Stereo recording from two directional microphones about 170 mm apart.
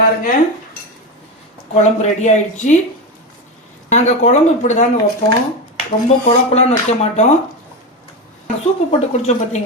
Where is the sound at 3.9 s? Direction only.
45° left (ahead or behind).